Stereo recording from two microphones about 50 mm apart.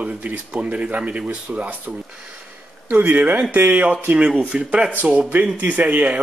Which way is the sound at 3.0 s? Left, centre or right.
Right.